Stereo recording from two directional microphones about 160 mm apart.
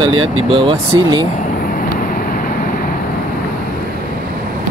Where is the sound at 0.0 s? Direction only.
30° right (ahead or behind).